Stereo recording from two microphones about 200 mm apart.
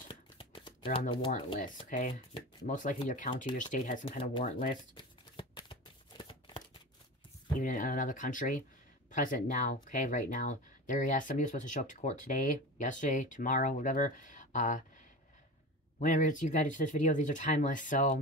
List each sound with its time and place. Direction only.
0.1 s shuffling cards: 25° left (ahead or behind)
0.9 s speech: 25° left (ahead or behind)
1.9 s speech: 40° left (ahead or behind)
4.0 s speech: 25° left (ahead or behind)
4.5 s speech: 40° left (ahead or behind)
4.9 s shuffling cards: 25° left (ahead or behind)
7.6 s speech: 40° left (ahead or behind)
16.0 s speech: 40° left (ahead or behind)